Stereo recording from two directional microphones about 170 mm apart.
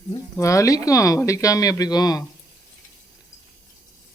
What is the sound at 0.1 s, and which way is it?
Speech, 20° left (ahead or behind).